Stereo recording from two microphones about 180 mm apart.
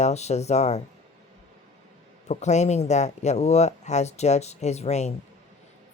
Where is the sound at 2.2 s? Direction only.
40° left (ahead or behind).